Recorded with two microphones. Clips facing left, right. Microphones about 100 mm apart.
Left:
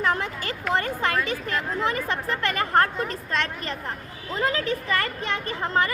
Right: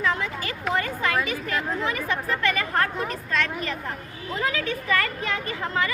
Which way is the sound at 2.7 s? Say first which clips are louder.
Left 3 dB; 35° left (ahead or behind).